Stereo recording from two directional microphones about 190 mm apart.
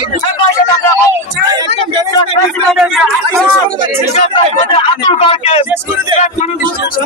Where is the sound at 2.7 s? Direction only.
Centre (ahead or behind).